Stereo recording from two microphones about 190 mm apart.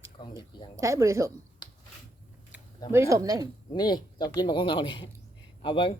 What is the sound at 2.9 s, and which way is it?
Speech, 15° right (ahead or behind).